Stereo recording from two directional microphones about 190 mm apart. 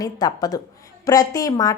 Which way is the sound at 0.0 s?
20° left (ahead or behind).